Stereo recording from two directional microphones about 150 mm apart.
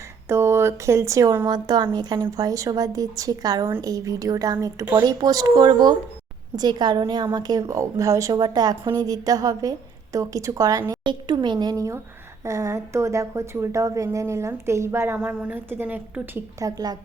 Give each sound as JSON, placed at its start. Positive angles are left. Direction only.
{"t": 0.3, "sound": "speech", "side_deg": -15}
{"t": 16.6, "sound": "speech", "side_deg": -25}